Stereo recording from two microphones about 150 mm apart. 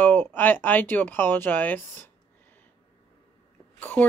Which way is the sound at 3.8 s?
10° left (ahead or behind).